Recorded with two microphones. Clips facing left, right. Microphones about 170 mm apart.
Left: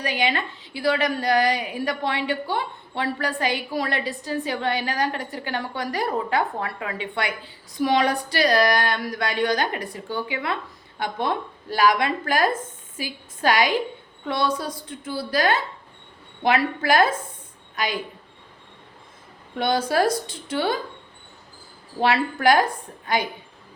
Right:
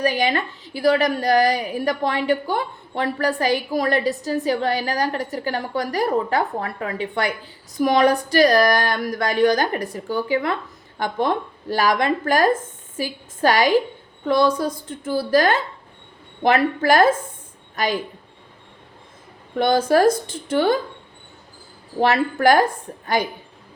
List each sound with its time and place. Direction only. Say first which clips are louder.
0.0 s a woman's voice: right 4 dB; 45° right (ahead or behind)
19.5 s speech: right 5 dB; 50° right (ahead or behind)
22.0 s speech: right 3 dB; 45° right (ahead or behind)